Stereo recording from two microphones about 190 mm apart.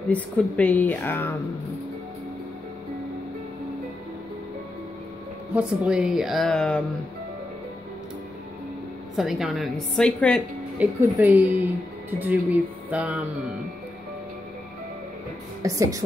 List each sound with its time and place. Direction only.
0.1 s speech: 5° left (ahead or behind)
5.5 s a woman's voice: 5° right (ahead or behind)
9.1 s a woman's voice: centre (ahead or behind)
10.8 s speech: 10° right (ahead or behind)
15.6 s speech: 15° right (ahead or behind)